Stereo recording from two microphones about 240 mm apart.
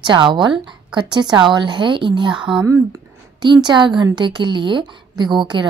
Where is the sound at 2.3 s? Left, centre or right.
Centre.